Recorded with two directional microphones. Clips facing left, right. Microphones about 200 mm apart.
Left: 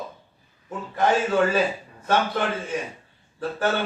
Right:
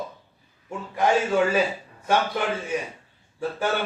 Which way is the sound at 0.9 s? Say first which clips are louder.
Even; 10° right (ahead or behind).